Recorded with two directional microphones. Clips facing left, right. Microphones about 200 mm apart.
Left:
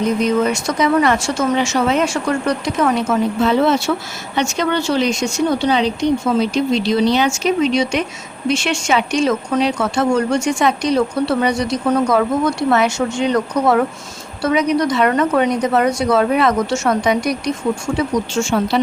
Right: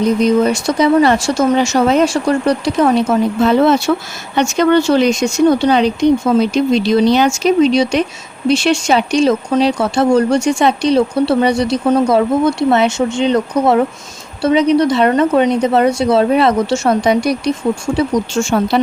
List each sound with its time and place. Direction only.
0.0 s a woman's voice: 35° right (ahead or behind)